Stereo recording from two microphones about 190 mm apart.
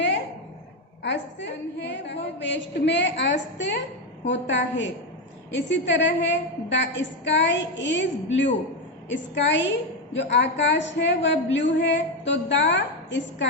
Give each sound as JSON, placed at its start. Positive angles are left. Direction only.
{"t": 1.0, "sound": "a woman's voice", "side_deg": 70}